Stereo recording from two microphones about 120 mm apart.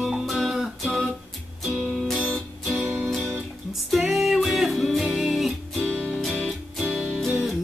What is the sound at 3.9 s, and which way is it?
Music, centre (ahead or behind).